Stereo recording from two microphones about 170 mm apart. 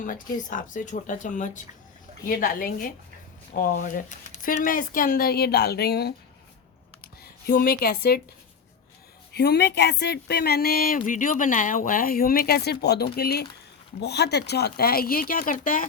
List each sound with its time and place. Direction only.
0.0 s speech: 50° left (ahead or behind)
2.2 s speech: 60° left (ahead or behind)
9.3 s speech: 75° left (ahead or behind)
14.0 s speech: 80° left; by 15.9 s 50° left (ahead or behind)